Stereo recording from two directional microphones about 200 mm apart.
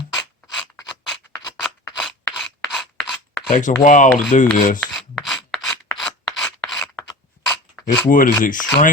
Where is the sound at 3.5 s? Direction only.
40° left (ahead or behind).